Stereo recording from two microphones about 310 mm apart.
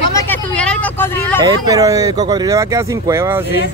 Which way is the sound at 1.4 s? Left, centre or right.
Centre.